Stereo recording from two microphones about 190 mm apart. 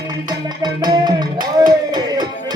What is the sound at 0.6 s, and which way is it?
Music, 20° right (ahead or behind).